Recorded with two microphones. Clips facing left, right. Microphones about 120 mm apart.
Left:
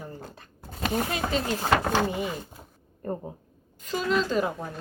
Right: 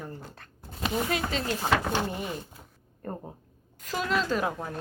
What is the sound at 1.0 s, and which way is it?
Speech, 20° left (ahead or behind).